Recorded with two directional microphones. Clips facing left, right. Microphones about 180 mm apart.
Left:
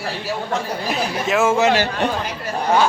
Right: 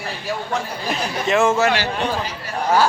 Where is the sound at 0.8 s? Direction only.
Centre (ahead or behind).